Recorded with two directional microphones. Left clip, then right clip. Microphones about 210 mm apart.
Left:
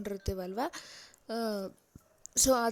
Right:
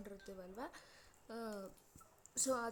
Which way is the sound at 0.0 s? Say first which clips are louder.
Left 15 dB; 40° left (ahead or behind).